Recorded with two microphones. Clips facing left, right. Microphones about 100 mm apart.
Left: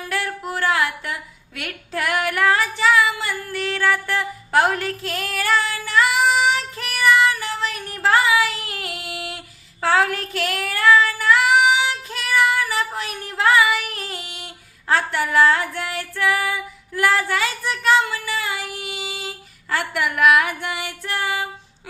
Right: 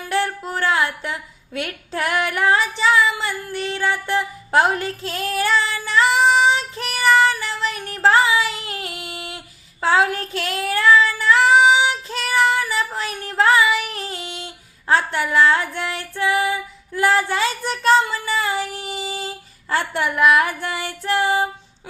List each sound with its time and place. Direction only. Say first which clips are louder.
0.1 s a sound: right 4 dB; 25° right (ahead or behind)
1.5 s female singing: right 2 dB; 25° right (ahead or behind)
9.8 s child singing: right 1 dB; 20° right (ahead or behind)
13.0 s female singing: right 3 dB; 35° right (ahead or behind)
19.7 s child singing: right 2 dB; 30° right (ahead or behind)